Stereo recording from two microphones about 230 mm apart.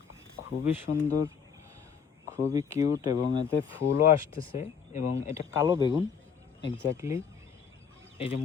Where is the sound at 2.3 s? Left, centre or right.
Centre.